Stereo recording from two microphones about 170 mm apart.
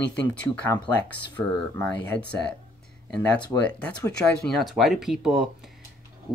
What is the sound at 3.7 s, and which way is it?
Speech, 5° left (ahead or behind).